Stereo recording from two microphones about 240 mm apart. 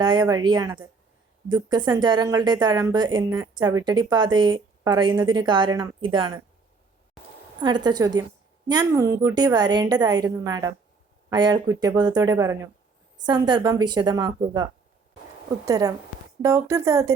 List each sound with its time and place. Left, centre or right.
0.0 s a woman's voice: centre
7.6 s a woman's voice: centre